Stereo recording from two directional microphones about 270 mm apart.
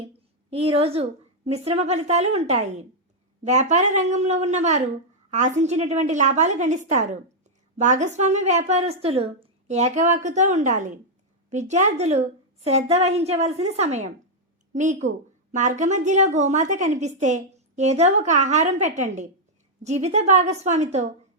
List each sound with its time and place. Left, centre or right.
0.5 s a woman's voice: right